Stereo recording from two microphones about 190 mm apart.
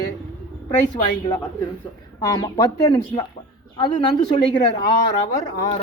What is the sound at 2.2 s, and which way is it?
Speech, 15° left (ahead or behind).